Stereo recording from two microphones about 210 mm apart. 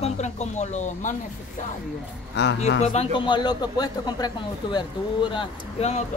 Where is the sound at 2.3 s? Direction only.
55° left (ahead or behind).